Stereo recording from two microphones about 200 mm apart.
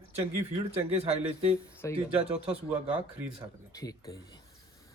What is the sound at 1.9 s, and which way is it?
Speech, 25° right (ahead or behind).